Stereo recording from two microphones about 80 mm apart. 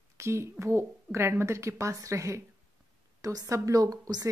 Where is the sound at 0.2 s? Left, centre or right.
Right.